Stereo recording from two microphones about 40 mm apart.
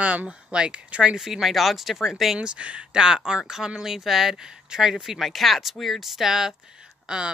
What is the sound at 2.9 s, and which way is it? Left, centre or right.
Speech, centre.